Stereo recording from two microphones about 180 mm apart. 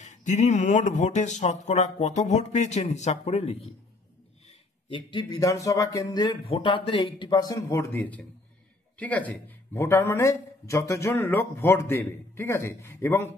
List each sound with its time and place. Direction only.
0.0 s speech: 40° left (ahead or behind); by 13.3 s 15° left (ahead or behind)